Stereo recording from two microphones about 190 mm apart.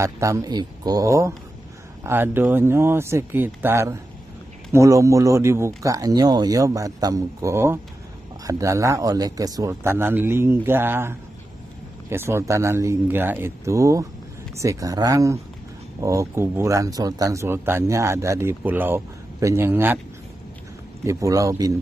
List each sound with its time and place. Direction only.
0.0 s speech: 15° right (ahead or behind)
21.0 s speech: 15° right (ahead or behind)